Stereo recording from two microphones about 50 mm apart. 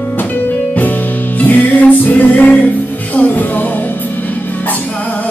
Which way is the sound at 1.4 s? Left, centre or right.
Left.